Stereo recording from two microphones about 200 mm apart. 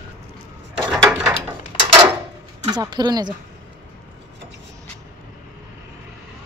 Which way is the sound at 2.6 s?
20° right (ahead or behind).